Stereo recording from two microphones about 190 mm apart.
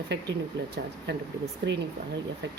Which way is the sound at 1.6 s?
65° right (ahead or behind).